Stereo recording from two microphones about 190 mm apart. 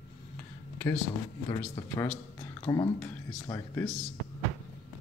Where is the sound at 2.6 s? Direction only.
20° left (ahead or behind).